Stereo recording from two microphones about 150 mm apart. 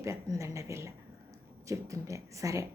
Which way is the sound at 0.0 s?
20° right (ahead or behind).